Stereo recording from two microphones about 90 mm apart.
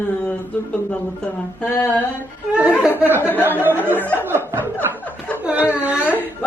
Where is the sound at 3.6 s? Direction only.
20° right (ahead or behind).